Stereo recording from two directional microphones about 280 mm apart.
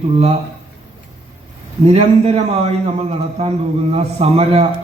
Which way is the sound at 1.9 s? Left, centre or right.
Right.